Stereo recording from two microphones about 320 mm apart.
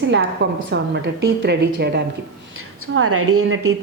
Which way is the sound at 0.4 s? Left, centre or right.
Right.